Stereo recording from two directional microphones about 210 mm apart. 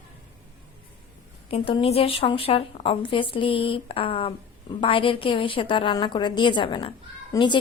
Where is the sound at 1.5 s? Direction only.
25° left (ahead or behind).